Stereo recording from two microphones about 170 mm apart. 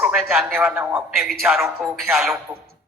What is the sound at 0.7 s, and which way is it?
Speech, 15° right (ahead or behind).